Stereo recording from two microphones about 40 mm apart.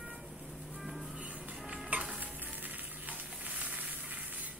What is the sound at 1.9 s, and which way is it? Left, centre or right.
Stir, right.